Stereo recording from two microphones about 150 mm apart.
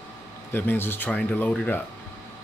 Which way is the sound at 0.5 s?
15° left (ahead or behind).